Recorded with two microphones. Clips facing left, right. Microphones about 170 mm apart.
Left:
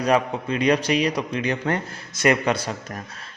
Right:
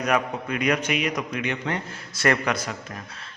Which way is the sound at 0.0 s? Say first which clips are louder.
Left 3 dB; 30° left (ahead or behind).